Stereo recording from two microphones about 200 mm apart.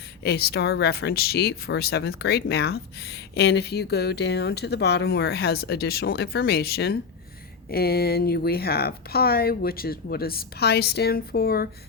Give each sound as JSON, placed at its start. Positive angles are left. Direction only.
{"t": 0.2, "sound": "speech", "side_deg": 55}